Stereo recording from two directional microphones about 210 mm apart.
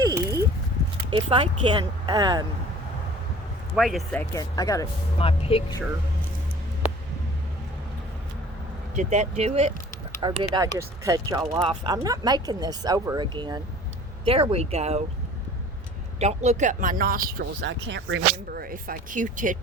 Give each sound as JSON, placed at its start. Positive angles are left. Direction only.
{"t": 0.0, "sound": "a sound", "side_deg": -15}
{"t": 1.1, "sound": "speech", "side_deg": -25}
{"t": 3.8, "sound": "speech", "side_deg": 0}
{"t": 4.4, "sound": "speech", "side_deg": 15}
{"t": 5.1, "sound": "speech", "side_deg": 25}
{"t": 9.0, "sound": "speech", "side_deg": -35}
{"t": 16.2, "sound": "speech", "side_deg": -30}